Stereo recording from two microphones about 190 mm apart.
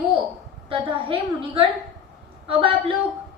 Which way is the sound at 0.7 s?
25° right (ahead or behind).